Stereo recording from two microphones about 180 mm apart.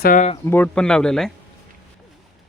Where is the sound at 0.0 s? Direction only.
50° left (ahead or behind).